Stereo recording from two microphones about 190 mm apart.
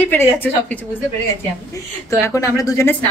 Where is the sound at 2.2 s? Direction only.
15° left (ahead or behind).